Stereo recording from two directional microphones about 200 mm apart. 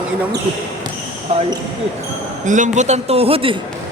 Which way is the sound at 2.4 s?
40° right (ahead or behind).